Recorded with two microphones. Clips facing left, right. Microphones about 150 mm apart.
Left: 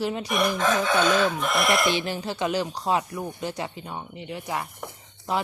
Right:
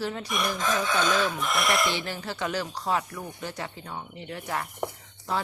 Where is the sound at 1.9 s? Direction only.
20° left (ahead or behind).